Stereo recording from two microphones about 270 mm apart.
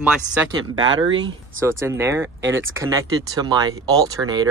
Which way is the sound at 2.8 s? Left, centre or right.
Centre.